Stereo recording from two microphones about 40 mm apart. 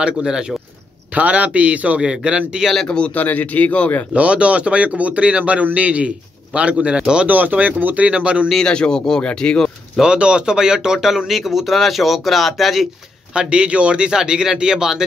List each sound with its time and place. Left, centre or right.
0.0 s a man's voice: centre
1.1 s speech: right
2.0 s speech: centre
3.2 s speech: left
4.1 s speech: right
7.2 s speech: right
8.6 s speech: left
10.0 s speech: right; by 12.8 s centre
13.3 s speech: right